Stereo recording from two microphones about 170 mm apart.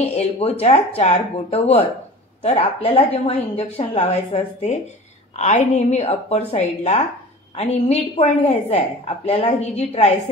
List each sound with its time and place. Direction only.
0.0 s a woman's voice: 35° left (ahead or behind)